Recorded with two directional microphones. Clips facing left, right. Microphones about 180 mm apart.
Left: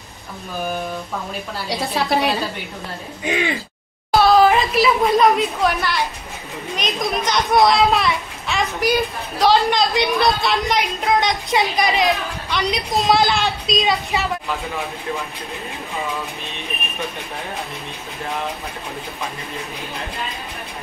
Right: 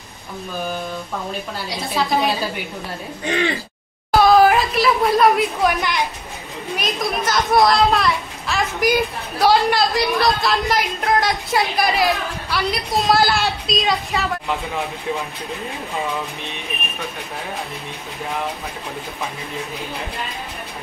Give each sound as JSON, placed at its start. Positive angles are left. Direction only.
{"t": 3.3, "sound": "speech", "side_deg": 10}
{"t": 4.1, "sound": "a sound", "side_deg": -10}
{"t": 5.6, "sound": "a woman's voice", "side_deg": -15}
{"t": 6.7, "sound": "a child's voice", "side_deg": -5}